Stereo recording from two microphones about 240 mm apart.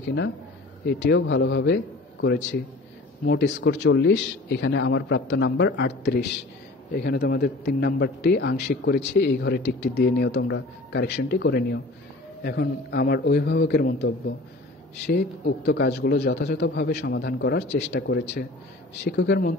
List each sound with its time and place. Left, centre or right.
0.8 s a man's voice: left
3.3 s a man's voice: left
15.0 s a man's voice: left